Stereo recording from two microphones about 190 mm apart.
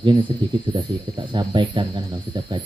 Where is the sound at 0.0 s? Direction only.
25° right (ahead or behind).